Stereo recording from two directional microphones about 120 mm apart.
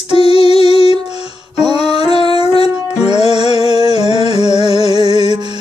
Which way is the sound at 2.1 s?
55° left (ahead or behind).